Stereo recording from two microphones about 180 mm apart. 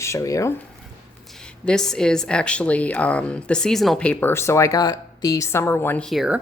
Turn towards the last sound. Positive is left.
turn(degrees=0)  # may be behind; listen again after turning